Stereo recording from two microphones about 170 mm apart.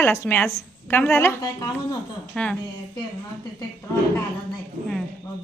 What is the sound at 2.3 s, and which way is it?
Speech, 5° left (ahead or behind).